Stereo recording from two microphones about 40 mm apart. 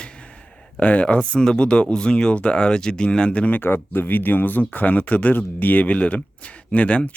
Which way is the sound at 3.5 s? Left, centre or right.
Left.